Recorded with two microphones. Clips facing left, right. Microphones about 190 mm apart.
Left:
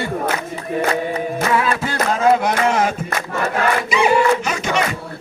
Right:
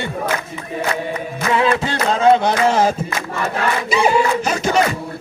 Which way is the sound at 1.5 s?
25° right (ahead or behind).